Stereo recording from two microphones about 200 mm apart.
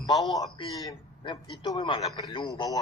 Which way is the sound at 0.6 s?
25° left (ahead or behind).